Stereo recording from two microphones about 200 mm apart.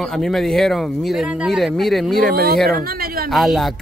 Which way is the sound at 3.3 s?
Centre (ahead or behind).